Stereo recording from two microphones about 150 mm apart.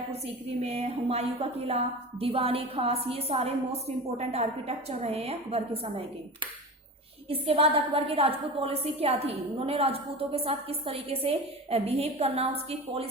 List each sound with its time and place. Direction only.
0.6 s a woman's voice: 45° right (ahead or behind)
7.3 s a woman's voice: 40° right (ahead or behind)